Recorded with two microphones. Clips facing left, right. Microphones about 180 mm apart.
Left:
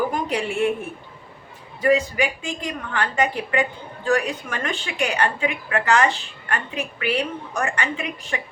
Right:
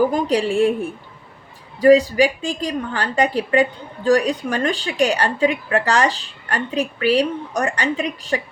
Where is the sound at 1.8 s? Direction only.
35° right (ahead or behind).